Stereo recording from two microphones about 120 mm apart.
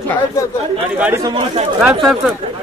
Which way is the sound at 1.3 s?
60° right (ahead or behind).